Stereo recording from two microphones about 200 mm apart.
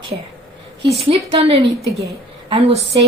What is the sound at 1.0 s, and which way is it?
A woman's voice, 30° right (ahead or behind).